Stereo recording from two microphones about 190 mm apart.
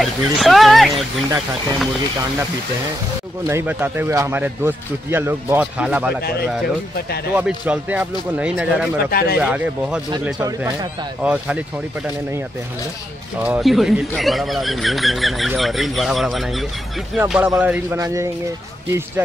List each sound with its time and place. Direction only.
0.0 s speech: centre (ahead or behind)
3.4 s speech: 10° right (ahead or behind)
7.3 s speech: 5° right (ahead or behind)
9.1 s speech: 55° left (ahead or behind)
9.4 s speech: 5° right (ahead or behind)
10.4 s speech: 20° right (ahead or behind)
11.2 s speech: 5° right (ahead or behind)
13.4 s speech: 5° right (ahead or behind)